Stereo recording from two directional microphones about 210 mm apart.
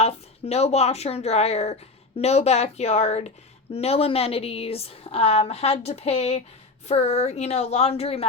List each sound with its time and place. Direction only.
0.0 s speech: 30° left (ahead or behind)